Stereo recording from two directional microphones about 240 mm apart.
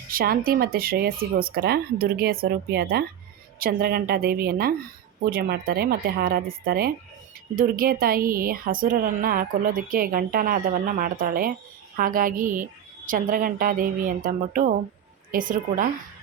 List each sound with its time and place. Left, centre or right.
0.1 s a woman's voice: right